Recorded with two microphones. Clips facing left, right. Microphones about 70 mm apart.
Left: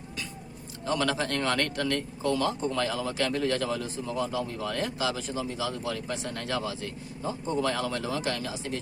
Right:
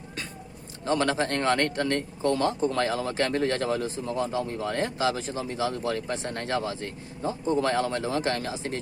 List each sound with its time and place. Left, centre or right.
0.9 s speech: right